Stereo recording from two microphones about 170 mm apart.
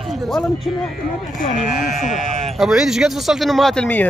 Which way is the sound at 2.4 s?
Centre (ahead or behind).